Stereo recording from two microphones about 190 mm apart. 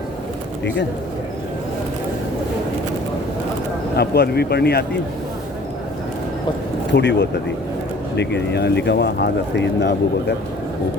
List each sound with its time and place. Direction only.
3.9 s speech: 55° left (ahead or behind)
6.9 s speech: 65° left (ahead or behind)